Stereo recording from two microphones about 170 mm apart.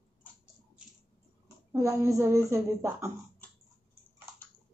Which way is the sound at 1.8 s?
20° right (ahead or behind).